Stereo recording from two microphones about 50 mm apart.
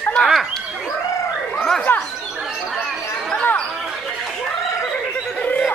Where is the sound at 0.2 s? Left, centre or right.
Centre.